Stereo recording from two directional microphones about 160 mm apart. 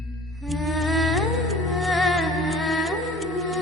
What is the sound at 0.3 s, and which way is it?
Music, centre (ahead or behind).